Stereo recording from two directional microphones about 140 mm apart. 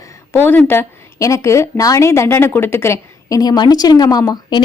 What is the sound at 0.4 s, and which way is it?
A woman's voice, 15° left (ahead or behind).